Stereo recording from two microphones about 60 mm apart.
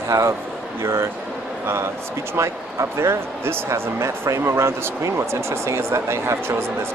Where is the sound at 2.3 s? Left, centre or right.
Right.